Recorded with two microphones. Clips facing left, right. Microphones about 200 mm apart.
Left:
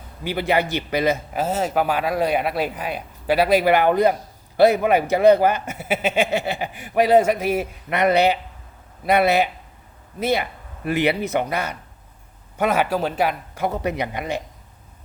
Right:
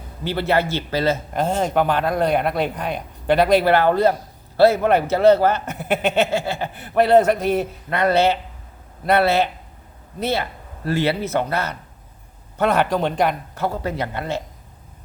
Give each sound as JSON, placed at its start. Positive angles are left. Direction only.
{"t": 0.3, "sound": "speech", "side_deg": 15}
{"t": 6.3, "sound": "speech", "side_deg": 20}
{"t": 13.7, "sound": "speech", "side_deg": 20}